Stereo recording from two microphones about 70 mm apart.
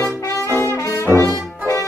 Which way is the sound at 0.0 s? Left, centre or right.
Left.